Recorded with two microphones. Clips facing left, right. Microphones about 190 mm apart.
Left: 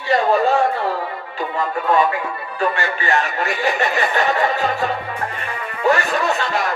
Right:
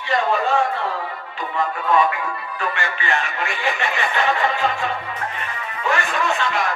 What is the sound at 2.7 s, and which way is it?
Speech, 40° left (ahead or behind).